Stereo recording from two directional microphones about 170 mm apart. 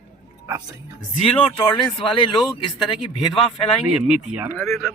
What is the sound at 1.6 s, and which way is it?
Speech, 25° left (ahead or behind).